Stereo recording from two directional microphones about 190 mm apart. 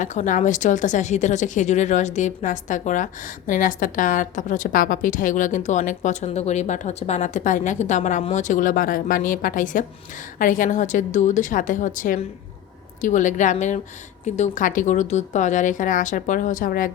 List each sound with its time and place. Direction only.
0.0 s a woman's voice: 40° left (ahead or behind)